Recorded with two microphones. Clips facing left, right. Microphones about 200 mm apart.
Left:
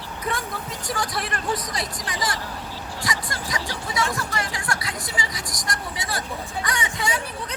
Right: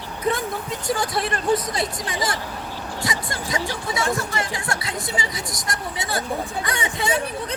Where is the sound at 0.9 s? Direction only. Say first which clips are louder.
Right 5 dB; 25° right (ahead or behind).